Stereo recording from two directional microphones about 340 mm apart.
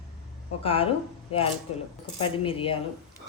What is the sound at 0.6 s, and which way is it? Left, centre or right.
Speech, centre.